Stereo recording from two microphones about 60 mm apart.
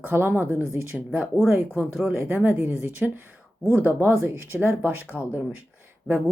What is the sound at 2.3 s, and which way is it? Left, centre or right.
Speech, right.